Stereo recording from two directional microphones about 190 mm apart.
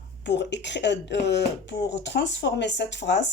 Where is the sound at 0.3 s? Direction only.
65° left (ahead or behind).